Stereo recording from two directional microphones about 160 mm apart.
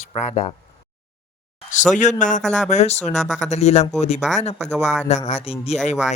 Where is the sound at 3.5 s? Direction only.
45° left (ahead or behind).